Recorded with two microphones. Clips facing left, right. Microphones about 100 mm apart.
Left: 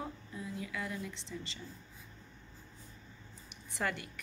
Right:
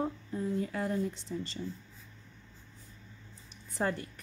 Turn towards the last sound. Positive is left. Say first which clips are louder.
# right 4 dB
turn(degrees=-35)  # may be behind; listen again after turning